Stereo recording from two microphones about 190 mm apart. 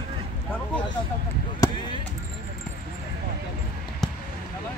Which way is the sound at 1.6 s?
20° left (ahead or behind).